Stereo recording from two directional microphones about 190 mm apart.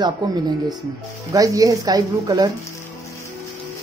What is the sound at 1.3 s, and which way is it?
Speech, 20° right (ahead or behind).